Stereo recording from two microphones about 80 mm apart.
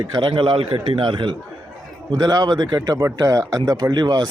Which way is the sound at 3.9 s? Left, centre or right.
Right.